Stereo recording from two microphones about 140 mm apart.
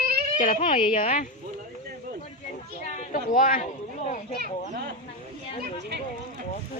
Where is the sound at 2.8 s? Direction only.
60° left (ahead or behind).